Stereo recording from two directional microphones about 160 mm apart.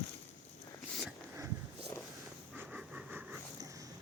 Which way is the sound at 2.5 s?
10° right (ahead or behind).